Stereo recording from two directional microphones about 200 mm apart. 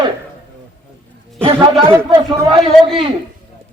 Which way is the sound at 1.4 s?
25° right (ahead or behind).